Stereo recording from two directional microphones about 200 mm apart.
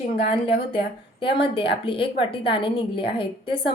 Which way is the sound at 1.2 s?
25° left (ahead or behind).